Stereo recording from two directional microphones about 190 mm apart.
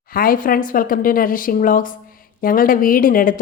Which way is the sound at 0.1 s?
50° left (ahead or behind).